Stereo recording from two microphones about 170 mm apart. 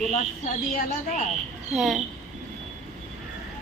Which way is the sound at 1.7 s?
Centre (ahead or behind).